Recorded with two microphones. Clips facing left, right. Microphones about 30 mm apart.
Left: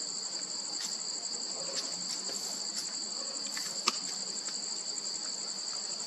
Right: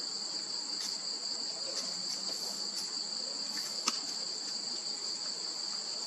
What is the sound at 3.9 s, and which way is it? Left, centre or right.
Cricket, left.